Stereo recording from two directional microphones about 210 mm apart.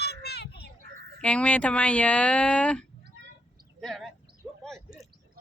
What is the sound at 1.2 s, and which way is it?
Speech, 5° left (ahead or behind).